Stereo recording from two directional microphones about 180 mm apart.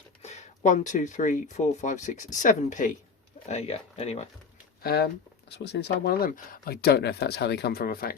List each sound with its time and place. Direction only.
0.2 s speech: 40° left (ahead or behind)
4.8 s speech: 60° left (ahead or behind)
5.5 s speech: 70° left (ahead or behind); by 8.1 s 55° left (ahead or behind)